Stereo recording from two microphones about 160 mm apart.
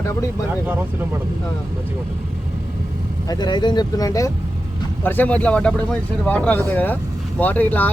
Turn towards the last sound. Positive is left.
turn(degrees=10)  # may be behind; listen again after turning